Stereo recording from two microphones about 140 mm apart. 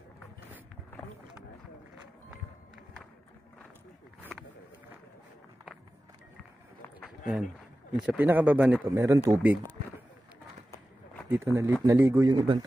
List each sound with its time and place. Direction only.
8.0 s speech: 10° right (ahead or behind)
11.2 s speech: 20° right (ahead or behind)
12.3 s speech: 30° right (ahead or behind)